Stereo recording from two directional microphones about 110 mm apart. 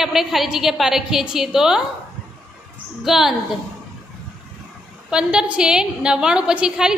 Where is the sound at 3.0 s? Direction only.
5° right (ahead or behind).